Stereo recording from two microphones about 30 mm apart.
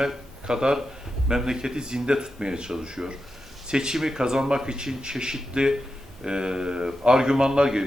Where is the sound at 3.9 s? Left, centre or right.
Centre.